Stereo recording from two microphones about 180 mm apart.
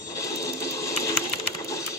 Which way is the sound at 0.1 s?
20° left (ahead or behind).